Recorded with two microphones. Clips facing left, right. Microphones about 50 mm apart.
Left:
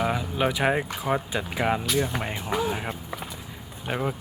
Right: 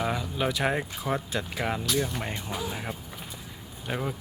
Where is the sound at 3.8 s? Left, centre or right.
Centre.